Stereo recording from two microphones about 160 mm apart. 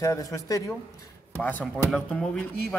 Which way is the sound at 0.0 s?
20° left (ahead or behind).